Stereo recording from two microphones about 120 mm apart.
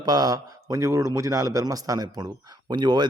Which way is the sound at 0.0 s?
35° right (ahead or behind).